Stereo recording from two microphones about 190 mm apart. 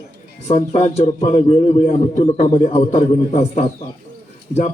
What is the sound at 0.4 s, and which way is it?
A man's voice, 35° left (ahead or behind).